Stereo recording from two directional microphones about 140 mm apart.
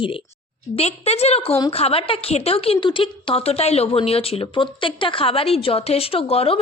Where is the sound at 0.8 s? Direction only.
50° left (ahead or behind).